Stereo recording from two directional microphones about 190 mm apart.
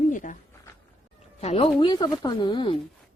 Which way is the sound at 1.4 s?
35° left (ahead or behind).